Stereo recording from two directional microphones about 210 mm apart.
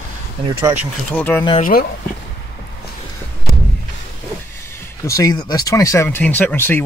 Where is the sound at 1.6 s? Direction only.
40° left (ahead or behind).